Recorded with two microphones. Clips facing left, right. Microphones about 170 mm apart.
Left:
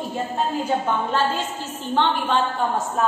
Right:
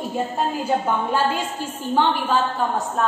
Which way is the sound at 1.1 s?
10° right (ahead or behind).